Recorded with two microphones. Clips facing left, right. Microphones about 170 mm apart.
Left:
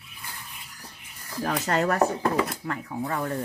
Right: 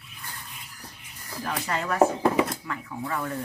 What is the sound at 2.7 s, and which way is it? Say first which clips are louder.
Speech: left 2 dB; 40° left (ahead or behind).